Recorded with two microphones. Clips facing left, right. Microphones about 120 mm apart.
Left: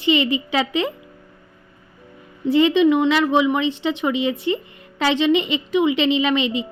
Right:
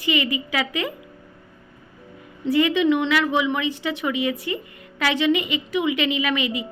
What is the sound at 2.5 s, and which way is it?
Speech, 25° left (ahead or behind).